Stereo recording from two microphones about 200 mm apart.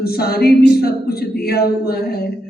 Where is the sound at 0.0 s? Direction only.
50° left (ahead or behind).